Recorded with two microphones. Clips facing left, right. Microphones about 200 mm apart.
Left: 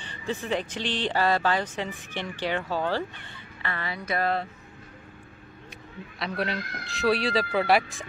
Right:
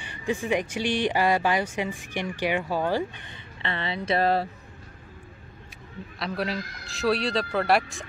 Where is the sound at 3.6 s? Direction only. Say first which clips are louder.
Right 3 dB; 25° right (ahead or behind).